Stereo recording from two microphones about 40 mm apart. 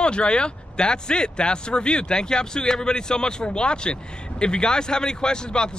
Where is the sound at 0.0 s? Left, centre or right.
Left.